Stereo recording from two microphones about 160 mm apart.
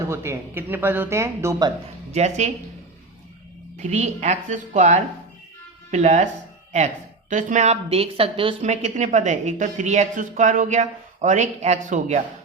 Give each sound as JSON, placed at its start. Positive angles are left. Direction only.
{"t": 0.1, "sound": "speech", "side_deg": -15}
{"t": 2.1, "sound": "a woman's voice", "side_deg": -45}
{"t": 3.8, "sound": "a woman's voice", "side_deg": -45}